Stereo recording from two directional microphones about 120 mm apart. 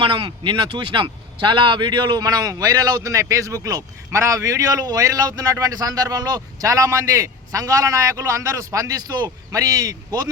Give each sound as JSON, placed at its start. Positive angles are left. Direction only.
{"t": 0.0, "sound": "speech", "side_deg": -45}